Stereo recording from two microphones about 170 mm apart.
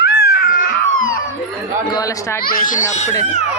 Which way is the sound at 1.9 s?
20° left (ahead or behind).